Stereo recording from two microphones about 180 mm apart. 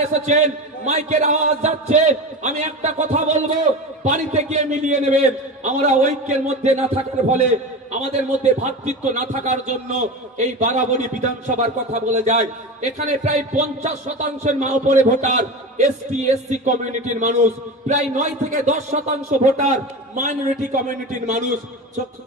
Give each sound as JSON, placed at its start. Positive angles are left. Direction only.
{"t": 0.0, "sound": "a man's voice", "side_deg": -40}